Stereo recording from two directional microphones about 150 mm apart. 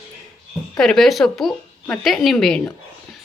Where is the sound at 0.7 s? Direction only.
5° left (ahead or behind).